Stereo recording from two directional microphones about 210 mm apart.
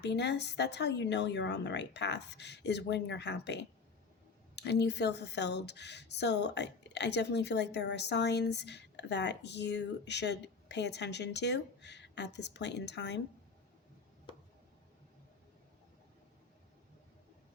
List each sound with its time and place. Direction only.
0.0 s speech: 55° left (ahead or behind)